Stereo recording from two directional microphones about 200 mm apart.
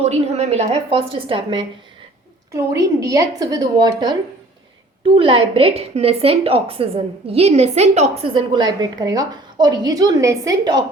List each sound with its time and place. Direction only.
0.0 s a woman's voice: 35° right (ahead or behind)